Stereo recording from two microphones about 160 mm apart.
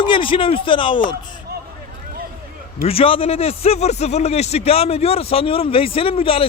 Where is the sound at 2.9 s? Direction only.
35° left (ahead or behind).